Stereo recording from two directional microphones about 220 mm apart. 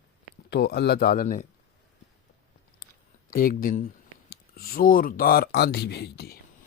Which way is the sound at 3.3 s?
40° left (ahead or behind).